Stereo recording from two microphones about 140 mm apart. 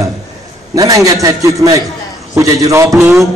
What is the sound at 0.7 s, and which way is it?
A man's voice, 25° right (ahead or behind).